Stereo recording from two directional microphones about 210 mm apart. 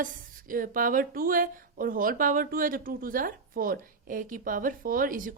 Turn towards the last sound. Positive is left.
turn(degrees=-40)  # may be behind; listen again after turning